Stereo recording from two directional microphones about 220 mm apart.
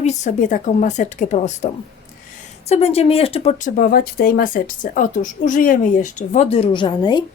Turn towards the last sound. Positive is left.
turn(degrees=20)  # may be behind; listen again after turning